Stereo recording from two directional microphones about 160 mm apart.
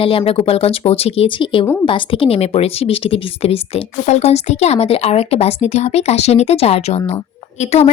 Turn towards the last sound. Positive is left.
turn(degrees=40)  # may be behind; listen again after turning